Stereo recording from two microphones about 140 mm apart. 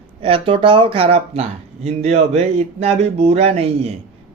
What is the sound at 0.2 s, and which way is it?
Speech, 40° right (ahead or behind).